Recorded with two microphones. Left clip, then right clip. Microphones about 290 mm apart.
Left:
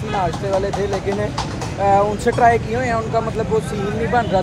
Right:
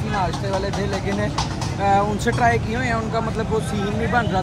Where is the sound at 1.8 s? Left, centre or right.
Centre.